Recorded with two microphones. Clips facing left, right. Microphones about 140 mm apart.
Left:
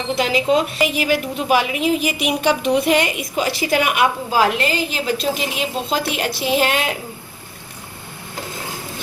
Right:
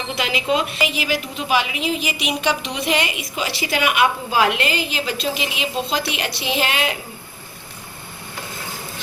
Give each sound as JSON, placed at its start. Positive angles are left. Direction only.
{"t": 0.2, "sound": "a woman's voice", "side_deg": 40}